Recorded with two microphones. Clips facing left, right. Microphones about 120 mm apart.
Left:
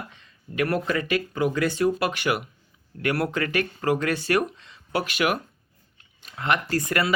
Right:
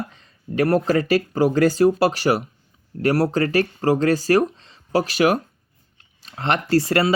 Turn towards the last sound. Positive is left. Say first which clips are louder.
# right 7 dB
turn(degrees=-30)  # may be behind; listen again after turning